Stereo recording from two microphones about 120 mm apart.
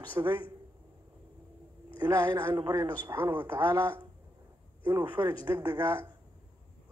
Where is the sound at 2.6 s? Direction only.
40° right (ahead or behind).